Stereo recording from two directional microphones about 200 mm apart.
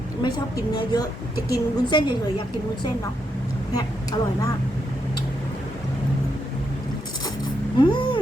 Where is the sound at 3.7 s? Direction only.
20° left (ahead or behind).